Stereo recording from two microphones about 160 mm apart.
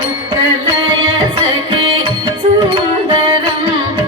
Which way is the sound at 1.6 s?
30° right (ahead or behind).